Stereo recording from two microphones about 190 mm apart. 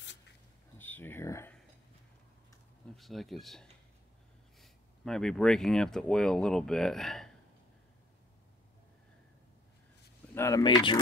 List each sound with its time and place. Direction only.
0.7 s a sound: 10° left (ahead or behind)
3.0 s speech: centre (ahead or behind)
10.3 s speech: 15° left (ahead or behind)